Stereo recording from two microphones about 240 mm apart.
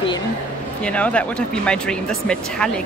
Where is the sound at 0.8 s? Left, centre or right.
Centre.